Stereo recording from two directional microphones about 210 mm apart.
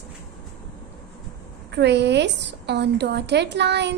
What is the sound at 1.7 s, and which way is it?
A woman's voice, 55° right (ahead or behind).